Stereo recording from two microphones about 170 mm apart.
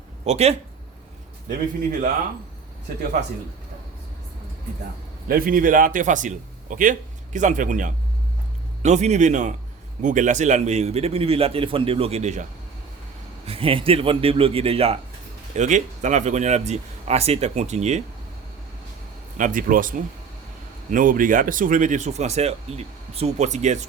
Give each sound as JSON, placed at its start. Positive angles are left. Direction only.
{"t": 0.3, "sound": "a man's voice", "side_deg": -40}
{"t": 5.3, "sound": "a man's voice", "side_deg": -55}
{"t": 19.4, "sound": "speech", "side_deg": -50}